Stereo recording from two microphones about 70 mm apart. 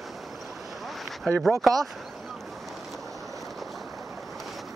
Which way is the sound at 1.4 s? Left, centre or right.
Centre.